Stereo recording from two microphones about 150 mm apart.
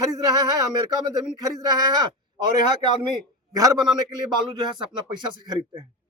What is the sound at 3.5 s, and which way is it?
A man's voice, 25° right (ahead or behind).